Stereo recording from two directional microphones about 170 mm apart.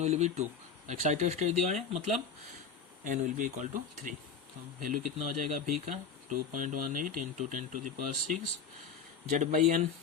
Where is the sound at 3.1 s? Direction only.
50° right (ahead or behind).